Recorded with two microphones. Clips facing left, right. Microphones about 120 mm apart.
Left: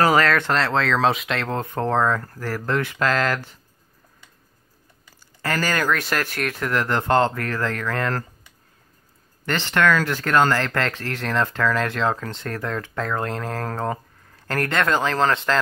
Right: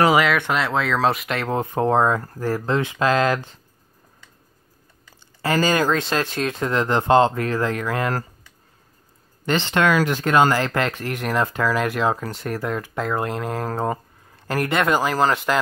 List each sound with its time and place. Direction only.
0.0 s speech: 10° right (ahead or behind)
5.4 s speech: 15° right (ahead or behind)
9.5 s speech: 15° right (ahead or behind)